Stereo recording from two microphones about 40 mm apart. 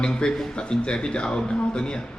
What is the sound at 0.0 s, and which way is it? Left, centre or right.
Speech, left.